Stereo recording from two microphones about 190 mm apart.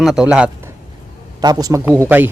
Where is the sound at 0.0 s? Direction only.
5° right (ahead or behind).